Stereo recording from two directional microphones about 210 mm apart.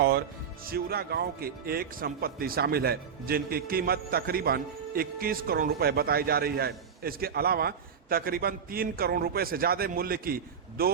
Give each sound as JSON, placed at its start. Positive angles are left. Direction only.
{"t": 0.6, "sound": "speech", "side_deg": -45}